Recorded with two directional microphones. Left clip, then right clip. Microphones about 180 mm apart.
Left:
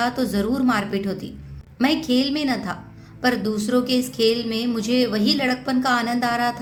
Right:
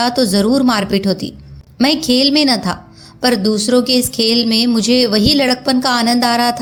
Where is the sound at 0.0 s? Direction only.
35° right (ahead or behind).